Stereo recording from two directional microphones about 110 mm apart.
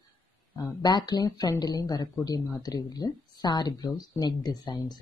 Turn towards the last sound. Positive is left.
turn(degrees=40)  # may be behind; listen again after turning